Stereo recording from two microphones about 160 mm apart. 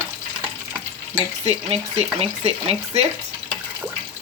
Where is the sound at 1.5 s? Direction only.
40° right (ahead or behind).